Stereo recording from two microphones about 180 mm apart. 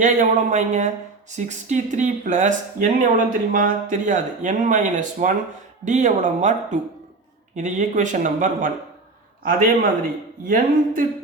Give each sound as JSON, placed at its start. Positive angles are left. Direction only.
{"t": 0.0, "sound": "speech", "side_deg": -45}